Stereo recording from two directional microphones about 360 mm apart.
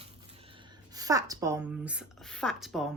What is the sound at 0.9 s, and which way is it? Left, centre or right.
A woman's voice, centre.